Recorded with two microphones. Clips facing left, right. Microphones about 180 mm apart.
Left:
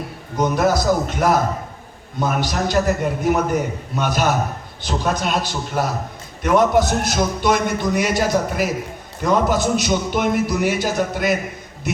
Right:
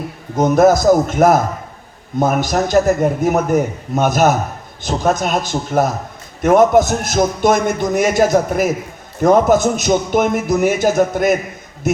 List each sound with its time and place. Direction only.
0.3 s a man's voice: 45° right (ahead or behind)